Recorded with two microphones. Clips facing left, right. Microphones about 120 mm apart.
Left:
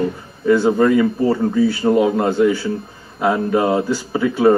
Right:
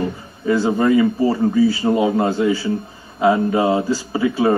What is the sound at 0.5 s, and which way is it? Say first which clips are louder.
Speech: left 2 dB; 15° right (ahead or behind).